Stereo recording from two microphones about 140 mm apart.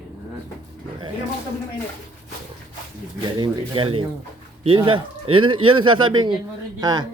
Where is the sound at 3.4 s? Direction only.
40° right (ahead or behind).